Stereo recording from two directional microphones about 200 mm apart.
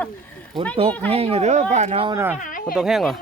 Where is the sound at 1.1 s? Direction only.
30° right (ahead or behind).